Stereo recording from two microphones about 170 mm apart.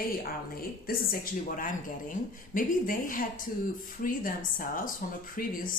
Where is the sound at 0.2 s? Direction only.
60° left (ahead or behind).